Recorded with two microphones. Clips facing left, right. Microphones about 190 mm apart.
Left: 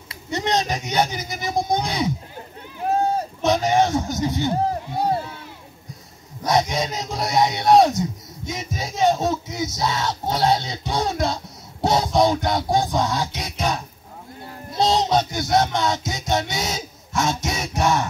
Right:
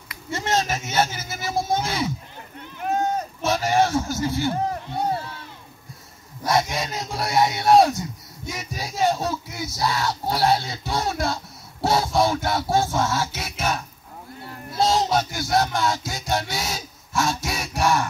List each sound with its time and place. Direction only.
0.1 s speech: 20° left (ahead or behind)
2.8 s a sound: 30° left (ahead or behind)
3.4 s a sound: 20° left (ahead or behind)
4.6 s speech: 35° left (ahead or behind)
6.4 s speech: 20° left (ahead or behind)
14.7 s child singing: 20° left (ahead or behind)
15.5 s speech: 20° left (ahead or behind)